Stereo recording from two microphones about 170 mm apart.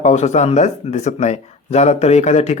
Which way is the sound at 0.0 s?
40° left (ahead or behind).